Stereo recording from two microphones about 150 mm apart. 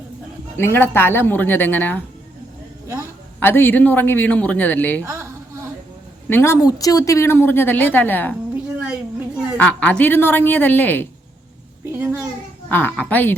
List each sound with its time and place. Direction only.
0.5 s a woman's voice: 15° left (ahead or behind)
2.8 s a sound: 15° right (ahead or behind)
3.4 s a woman's voice: 15° left (ahead or behind)
5.0 s a sound: 20° right (ahead or behind)
6.2 s a woman's voice: 15° left (ahead or behind)
8.5 s a sound: 10° right (ahead or behind)
9.6 s a woman's voice: 10° left (ahead or behind)
11.9 s a child's voice: 15° right (ahead or behind)
12.6 s a woman's voice: 10° left (ahead or behind)